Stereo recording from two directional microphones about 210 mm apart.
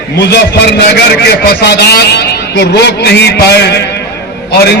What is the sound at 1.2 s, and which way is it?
A man's voice, 50° left (ahead or behind).